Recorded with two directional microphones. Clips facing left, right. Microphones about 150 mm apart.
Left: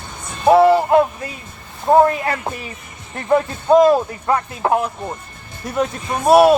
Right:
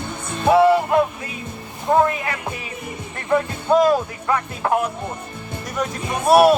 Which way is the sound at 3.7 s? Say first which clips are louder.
Left 4 dB; 25° left (ahead or behind).